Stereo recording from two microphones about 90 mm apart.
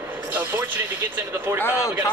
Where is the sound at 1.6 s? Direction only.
30° left (ahead or behind).